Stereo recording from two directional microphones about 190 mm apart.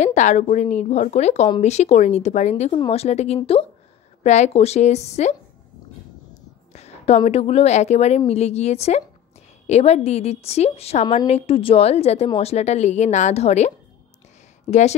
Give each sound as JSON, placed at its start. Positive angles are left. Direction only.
{"t": 0.0, "sound": "a woman's voice", "side_deg": 40}
{"t": 6.7, "sound": "a woman's voice", "side_deg": 35}